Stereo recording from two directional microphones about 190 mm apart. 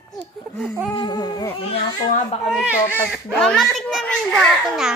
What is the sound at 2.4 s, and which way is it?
Speech, 5° right (ahead or behind).